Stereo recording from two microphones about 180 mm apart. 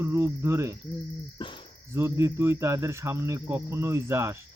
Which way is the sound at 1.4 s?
25° left (ahead or behind).